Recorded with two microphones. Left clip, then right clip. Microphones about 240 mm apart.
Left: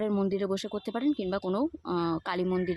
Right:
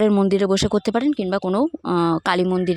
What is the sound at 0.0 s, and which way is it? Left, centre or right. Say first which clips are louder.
Speech: right 12 dB; right.